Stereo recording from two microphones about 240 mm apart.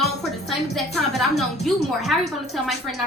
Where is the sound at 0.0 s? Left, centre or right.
Centre.